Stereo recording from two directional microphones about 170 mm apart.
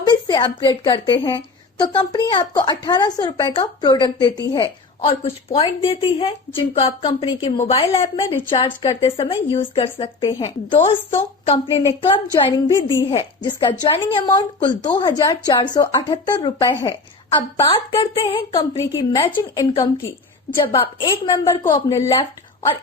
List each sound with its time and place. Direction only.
0.0 s a woman's voice: 25° left (ahead or behind)